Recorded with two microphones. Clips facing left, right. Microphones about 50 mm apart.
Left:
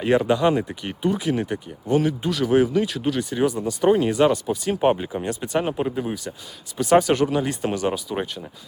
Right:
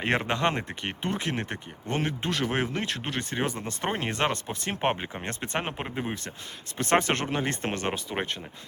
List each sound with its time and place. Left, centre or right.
0.0 s speech: right
3.8 s speech: right
4.1 s speech: right
4.6 s speech: right
5.2 s speech: right
5.5 s speech: right
6.7 s speech: right